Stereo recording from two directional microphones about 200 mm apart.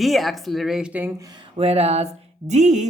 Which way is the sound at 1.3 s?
25° right (ahead or behind).